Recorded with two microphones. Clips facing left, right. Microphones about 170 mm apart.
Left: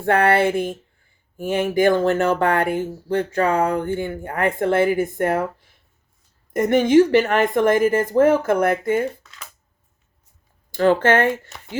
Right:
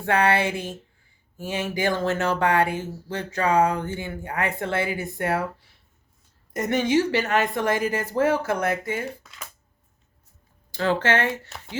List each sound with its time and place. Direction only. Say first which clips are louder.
0.0 s speech: left 5 dB; 55° left (ahead or behind)
10.7 s speech: left 6 dB; 50° left (ahead or behind)